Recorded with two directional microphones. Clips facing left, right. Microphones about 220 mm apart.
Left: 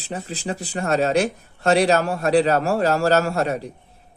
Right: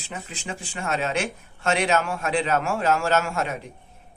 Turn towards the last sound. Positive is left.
turn(degrees=35)  # may be behind; listen again after turning